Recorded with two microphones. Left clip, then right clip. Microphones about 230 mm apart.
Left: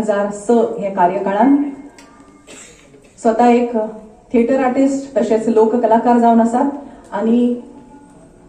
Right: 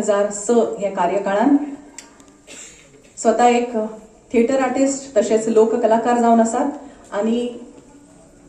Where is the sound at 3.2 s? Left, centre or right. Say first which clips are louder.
Left 2 dB; right.